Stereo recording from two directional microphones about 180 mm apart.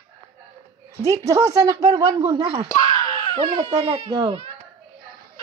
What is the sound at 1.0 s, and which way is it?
Speech, 20° right (ahead or behind).